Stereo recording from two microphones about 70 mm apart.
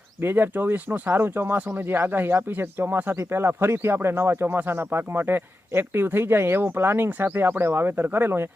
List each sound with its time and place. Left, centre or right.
0.2 s speech: right
1.5 s speech: right
1.8 s speech: right